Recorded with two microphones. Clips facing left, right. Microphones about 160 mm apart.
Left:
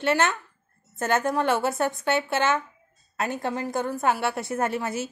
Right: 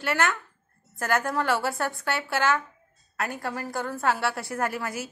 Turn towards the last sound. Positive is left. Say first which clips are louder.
# left 3 dB
turn(degrees=25)  # may be behind; listen again after turning